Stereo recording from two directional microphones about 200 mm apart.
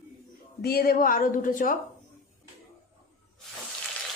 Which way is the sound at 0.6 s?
50° left (ahead or behind).